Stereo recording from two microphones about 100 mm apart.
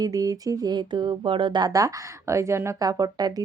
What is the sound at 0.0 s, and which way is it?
Speech, 35° right (ahead or behind).